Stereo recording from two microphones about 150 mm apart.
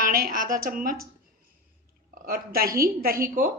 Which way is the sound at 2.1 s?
75° right (ahead or behind).